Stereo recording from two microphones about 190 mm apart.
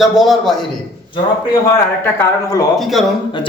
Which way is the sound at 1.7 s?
15° left (ahead or behind).